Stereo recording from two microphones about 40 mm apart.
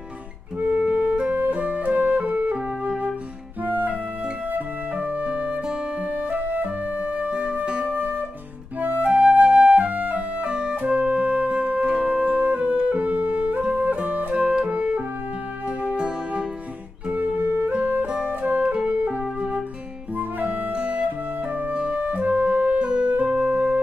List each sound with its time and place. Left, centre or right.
0.6 s music: right
3.6 s music: right
4.5 s flute: right
5.2 s music: right
6.4 s music: right
7.2 s music: right
8.8 s flute: right
12.9 s music: right
14.3 s music: right
15.8 s music: right
17.1 s music: right
19.0 s music: centre
20.2 s music: right
23.2 s music: right